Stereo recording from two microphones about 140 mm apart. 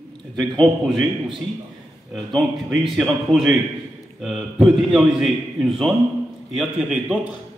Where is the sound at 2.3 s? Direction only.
Centre (ahead or behind).